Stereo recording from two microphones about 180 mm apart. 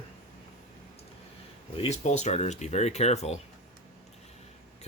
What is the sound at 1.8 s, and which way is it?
Speech, 40° left (ahead or behind).